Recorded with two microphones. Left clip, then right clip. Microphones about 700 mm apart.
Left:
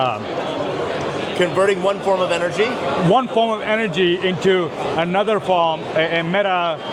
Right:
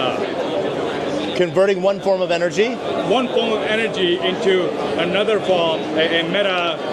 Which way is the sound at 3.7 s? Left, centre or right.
Left.